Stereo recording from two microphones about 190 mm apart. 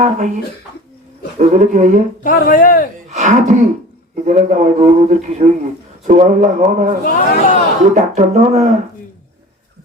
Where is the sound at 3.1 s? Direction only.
40° right (ahead or behind).